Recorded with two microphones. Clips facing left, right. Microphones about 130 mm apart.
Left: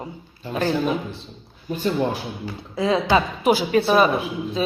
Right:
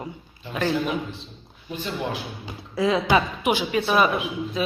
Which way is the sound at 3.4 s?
35° left (ahead or behind).